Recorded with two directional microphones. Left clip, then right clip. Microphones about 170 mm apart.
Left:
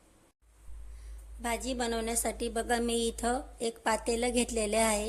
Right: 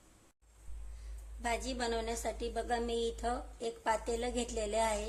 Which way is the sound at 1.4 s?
20° left (ahead or behind).